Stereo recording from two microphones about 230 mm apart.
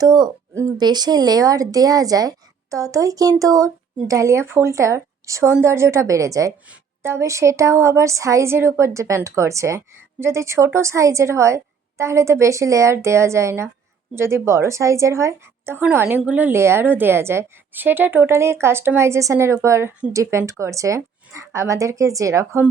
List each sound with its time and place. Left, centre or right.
0.0 s speech: centre